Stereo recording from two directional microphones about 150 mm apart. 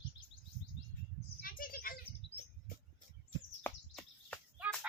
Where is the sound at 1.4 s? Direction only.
70° left (ahead or behind).